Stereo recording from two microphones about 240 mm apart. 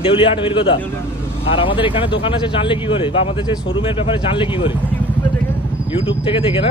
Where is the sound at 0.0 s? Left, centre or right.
Left.